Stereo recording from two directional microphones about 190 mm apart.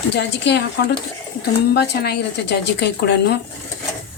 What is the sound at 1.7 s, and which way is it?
A woman's voice, 60° left (ahead or behind).